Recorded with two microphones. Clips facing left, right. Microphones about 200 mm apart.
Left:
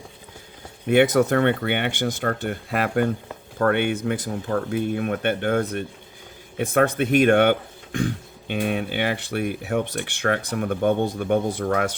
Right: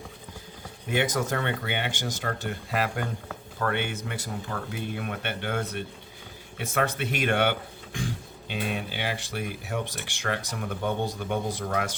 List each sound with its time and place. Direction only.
0.9 s speech: 60° left (ahead or behind)